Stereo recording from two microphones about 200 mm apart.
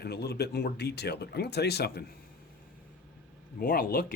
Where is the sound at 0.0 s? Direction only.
55° left (ahead or behind).